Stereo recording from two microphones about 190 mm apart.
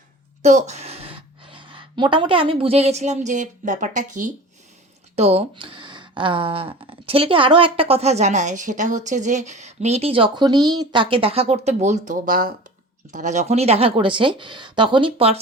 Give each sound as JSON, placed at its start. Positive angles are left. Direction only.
{"t": 0.4, "sound": "a woman's voice", "side_deg": -35}